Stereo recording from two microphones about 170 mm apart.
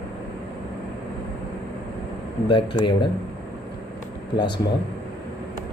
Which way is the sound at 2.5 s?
30° left (ahead or behind).